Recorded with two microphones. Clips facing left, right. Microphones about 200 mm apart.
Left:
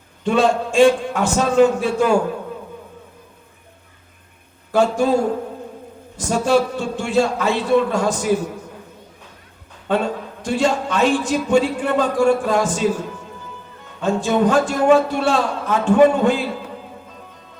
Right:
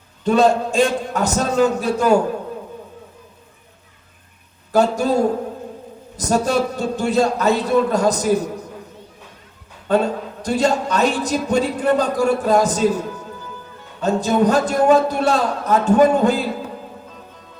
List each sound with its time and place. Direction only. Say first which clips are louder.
0.3 s a man's voice: right 2 dB; 40° right (ahead or behind)
4.7 s a man's voice: even; 40° right (ahead or behind)
6.1 s a man's voice: left 1 dB; 40° right (ahead or behind)
9.9 s a man's voice: right 2 dB; 40° right (ahead or behind)
14.0 s a man's voice: right 1 dB; 40° right (ahead or behind)